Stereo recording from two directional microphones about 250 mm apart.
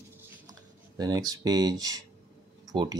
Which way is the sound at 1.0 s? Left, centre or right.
Centre.